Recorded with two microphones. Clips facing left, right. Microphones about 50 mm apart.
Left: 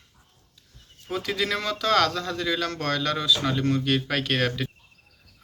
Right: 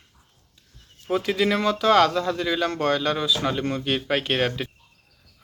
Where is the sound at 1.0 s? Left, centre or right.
Centre.